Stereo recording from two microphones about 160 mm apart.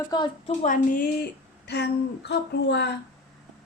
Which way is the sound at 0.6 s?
55° left (ahead or behind).